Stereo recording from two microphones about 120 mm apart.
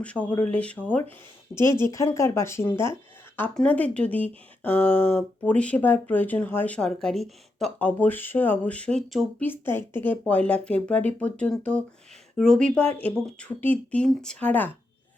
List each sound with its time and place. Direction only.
0.0 s speech: 10° left (ahead or behind)
3.5 s speech: 10° left (ahead or behind)